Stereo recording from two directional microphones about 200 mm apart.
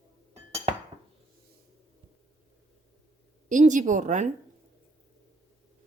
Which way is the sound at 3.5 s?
40° right (ahead or behind).